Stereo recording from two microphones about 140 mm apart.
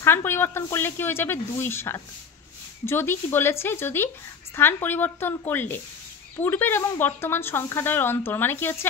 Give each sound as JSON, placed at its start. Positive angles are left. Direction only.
{"t": 0.0, "sound": "speech", "side_deg": 15}